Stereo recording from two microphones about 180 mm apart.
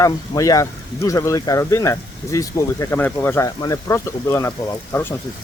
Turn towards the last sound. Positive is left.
turn(degrees=15)  # may be behind; listen again after turning